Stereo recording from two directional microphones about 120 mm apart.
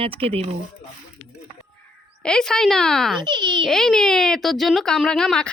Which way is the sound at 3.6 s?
5° left (ahead or behind).